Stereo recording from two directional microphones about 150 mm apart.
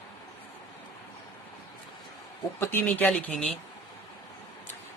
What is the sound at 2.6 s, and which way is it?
Speech, 15° left (ahead or behind).